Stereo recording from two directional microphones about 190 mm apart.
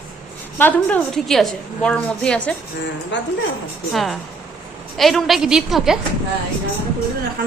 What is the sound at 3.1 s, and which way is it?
Speech, 70° left (ahead or behind).